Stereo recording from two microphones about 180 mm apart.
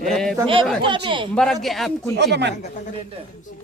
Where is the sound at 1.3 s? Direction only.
Centre (ahead or behind).